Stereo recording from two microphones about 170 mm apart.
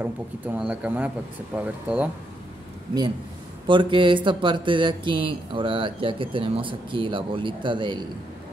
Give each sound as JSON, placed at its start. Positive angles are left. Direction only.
{"t": 0.0, "sound": "speech", "side_deg": -10}
{"t": 3.6, "sound": "speech", "side_deg": -30}